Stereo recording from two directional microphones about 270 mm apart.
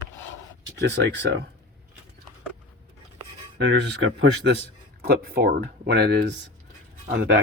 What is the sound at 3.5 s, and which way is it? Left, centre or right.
Speech, right.